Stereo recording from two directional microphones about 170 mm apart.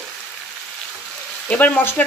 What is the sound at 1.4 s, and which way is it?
Speech, 10° left (ahead or behind).